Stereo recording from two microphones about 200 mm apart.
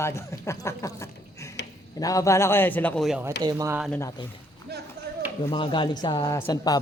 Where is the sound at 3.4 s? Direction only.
20° right (ahead or behind).